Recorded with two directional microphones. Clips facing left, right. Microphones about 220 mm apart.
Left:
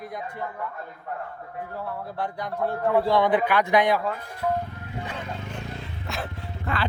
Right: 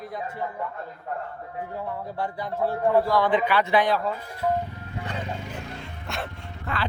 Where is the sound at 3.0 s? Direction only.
25° left (ahead or behind).